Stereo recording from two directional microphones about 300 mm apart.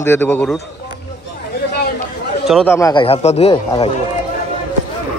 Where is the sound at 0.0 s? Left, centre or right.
Centre.